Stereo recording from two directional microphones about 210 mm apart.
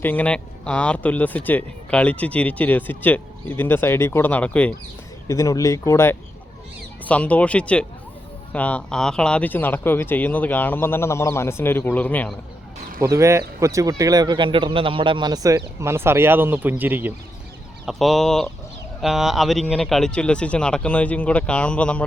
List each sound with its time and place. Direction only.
0.0 s speech: 10° left (ahead or behind)
13.0 s speech: 15° right (ahead or behind); by 22.0 s 5° left (ahead or behind)